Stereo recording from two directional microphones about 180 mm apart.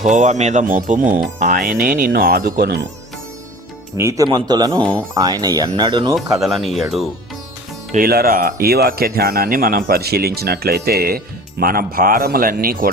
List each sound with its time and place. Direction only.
0.0 s speech: 45° right (ahead or behind); by 2.8 s 60° right (ahead or behind)
3.9 s speech: 15° right (ahead or behind)
6.4 s speech: centre (ahead or behind)
7.9 s speech: 55° right (ahead or behind)